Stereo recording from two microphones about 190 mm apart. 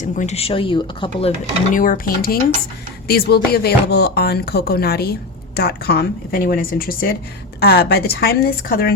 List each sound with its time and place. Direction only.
0.0 s speech: 40° left (ahead or behind)
1.7 s speech: 45° left (ahead or behind)